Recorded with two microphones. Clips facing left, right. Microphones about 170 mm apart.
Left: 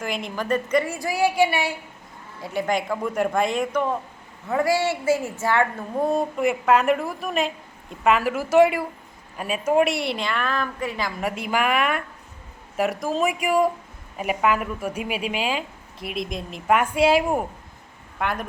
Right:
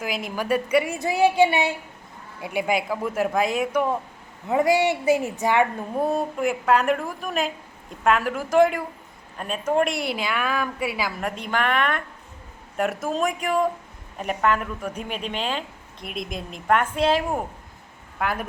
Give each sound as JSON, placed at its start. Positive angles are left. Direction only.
{"t": 0.0, "sound": "a woman's voice", "side_deg": -5}
{"t": 0.9, "sound": "a woman's voice", "side_deg": -25}
{"t": 6.0, "sound": "a woman's voice", "side_deg": 0}
{"t": 11.2, "sound": "a woman's voice", "side_deg": 5}
{"t": 18.2, "sound": "speech", "side_deg": 0}